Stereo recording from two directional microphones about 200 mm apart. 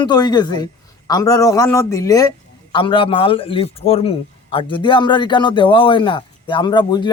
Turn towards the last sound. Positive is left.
turn(degrees=20)  # may be behind; listen again after turning